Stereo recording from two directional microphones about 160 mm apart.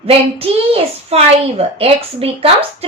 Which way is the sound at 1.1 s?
40° right (ahead or behind).